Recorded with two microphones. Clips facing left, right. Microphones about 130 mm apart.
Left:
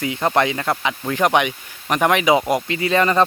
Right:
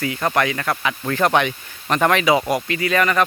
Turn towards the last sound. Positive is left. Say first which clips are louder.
# left 1 dB
turn(degrees=25)  # may be behind; listen again after turning